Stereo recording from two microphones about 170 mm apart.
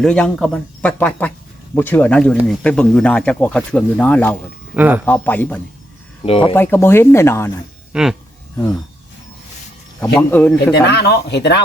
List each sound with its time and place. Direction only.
0.0 s speech: 5° left (ahead or behind)
4.7 s speech: 10° right (ahead or behind)
5.0 s speech: 10° left (ahead or behind)
6.2 s speech: 35° left (ahead or behind)
6.5 s speech: 15° left (ahead or behind)
7.9 s speech: 5° right (ahead or behind)
10.0 s speech: 10° left (ahead or behind)
10.7 s speech: 75° left (ahead or behind)